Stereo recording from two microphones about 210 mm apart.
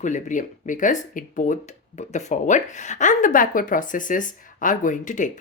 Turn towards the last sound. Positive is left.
turn(degrees=35)  # may be behind; listen again after turning